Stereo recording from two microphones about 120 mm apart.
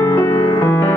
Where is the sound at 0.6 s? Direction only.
20° left (ahead or behind).